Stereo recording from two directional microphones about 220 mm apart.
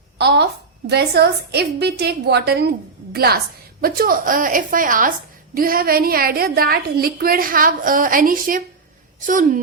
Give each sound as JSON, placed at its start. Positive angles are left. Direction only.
{"t": 0.2, "sound": "a woman's voice", "side_deg": -50}